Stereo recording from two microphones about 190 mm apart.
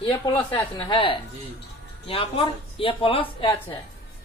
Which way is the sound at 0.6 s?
25° left (ahead or behind).